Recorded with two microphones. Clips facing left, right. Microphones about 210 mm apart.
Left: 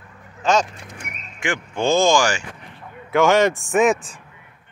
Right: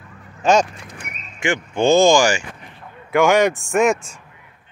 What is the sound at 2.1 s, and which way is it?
A man's voice, 15° right (ahead or behind).